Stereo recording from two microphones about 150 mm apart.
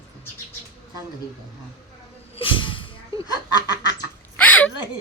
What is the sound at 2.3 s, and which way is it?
Speech, 35° left (ahead or behind).